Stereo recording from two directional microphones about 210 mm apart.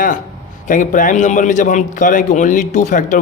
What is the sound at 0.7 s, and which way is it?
A man's voice, 40° left (ahead or behind).